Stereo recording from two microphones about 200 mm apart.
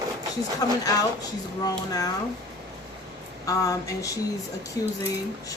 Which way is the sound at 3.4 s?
15° left (ahead or behind).